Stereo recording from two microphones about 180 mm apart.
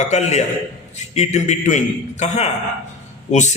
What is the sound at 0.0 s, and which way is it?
A man's voice, 40° left (ahead or behind).